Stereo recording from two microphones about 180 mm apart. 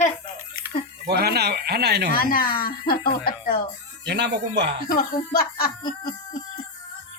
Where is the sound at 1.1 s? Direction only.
60° right (ahead or behind).